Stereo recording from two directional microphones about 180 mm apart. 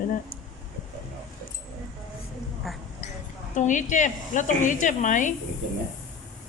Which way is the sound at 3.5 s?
45° left (ahead or behind).